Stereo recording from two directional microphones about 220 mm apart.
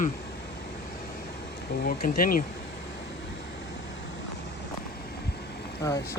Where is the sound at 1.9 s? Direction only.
40° left (ahead or behind).